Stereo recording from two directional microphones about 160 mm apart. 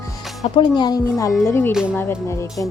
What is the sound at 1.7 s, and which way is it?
Speech, 5° right (ahead or behind).